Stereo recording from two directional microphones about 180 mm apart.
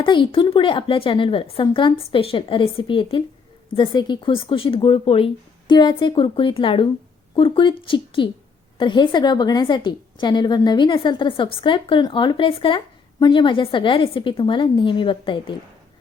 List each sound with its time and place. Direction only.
0.0 s a woman's voice: 25° left (ahead or behind)